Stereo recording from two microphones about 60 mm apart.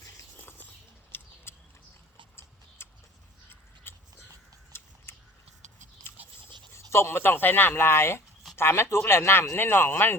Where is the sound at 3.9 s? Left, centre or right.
Left.